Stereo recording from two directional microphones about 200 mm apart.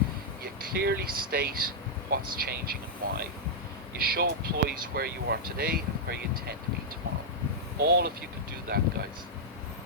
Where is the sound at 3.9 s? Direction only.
50° right (ahead or behind).